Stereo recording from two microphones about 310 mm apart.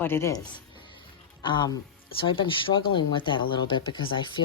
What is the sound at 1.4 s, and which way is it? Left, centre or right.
A woman's voice, centre.